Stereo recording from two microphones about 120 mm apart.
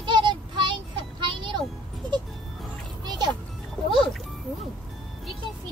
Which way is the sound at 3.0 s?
35° right (ahead or behind).